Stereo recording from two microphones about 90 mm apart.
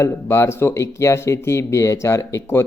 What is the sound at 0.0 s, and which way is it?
A man's voice, 30° left (ahead or behind).